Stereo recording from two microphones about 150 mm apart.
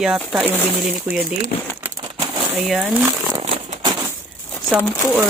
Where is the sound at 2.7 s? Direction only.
Centre (ahead or behind).